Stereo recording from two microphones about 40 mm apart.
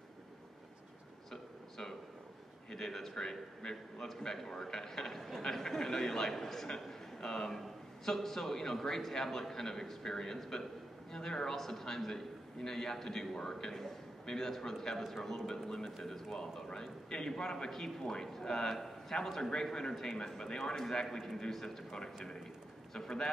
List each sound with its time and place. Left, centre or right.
1.3 s a sound: centre
2.7 s a man's voice: centre
21.9 s a man's voice: centre